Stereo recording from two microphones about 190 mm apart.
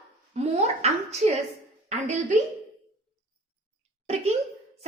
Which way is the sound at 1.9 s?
35° right (ahead or behind).